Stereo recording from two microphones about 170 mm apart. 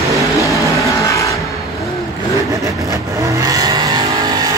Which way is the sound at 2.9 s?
20° right (ahead or behind).